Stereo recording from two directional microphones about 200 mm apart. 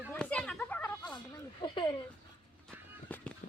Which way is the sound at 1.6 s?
20° left (ahead or behind).